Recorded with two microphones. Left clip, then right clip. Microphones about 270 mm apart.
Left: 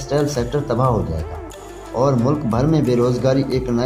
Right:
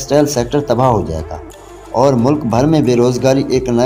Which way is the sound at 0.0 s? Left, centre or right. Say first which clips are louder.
Right 7 dB; right.